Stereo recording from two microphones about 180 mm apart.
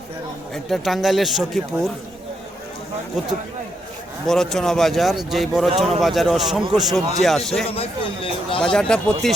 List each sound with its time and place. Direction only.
0.5 s a man's voice: centre (ahead or behind)
4.3 s a man's voice: centre (ahead or behind)
7.7 s speech: 30° left (ahead or behind)
8.6 s a man's voice: 5° left (ahead or behind)